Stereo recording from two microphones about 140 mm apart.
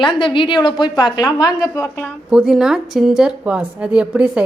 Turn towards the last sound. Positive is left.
turn(degrees=-10)  # may be behind; listen again after turning